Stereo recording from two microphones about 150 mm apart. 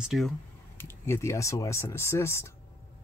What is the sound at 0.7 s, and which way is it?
Speech, 15° left (ahead or behind).